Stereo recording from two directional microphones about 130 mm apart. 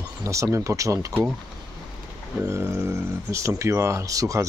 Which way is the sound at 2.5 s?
20° right (ahead or behind).